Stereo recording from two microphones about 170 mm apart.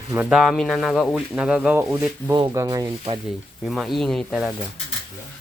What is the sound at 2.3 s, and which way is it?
Speech, 20° right (ahead or behind).